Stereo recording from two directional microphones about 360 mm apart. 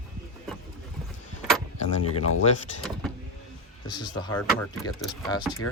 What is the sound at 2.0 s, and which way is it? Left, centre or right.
Speech, left.